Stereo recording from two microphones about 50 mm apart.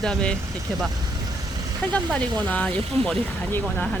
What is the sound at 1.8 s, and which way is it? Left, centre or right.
Speech, left.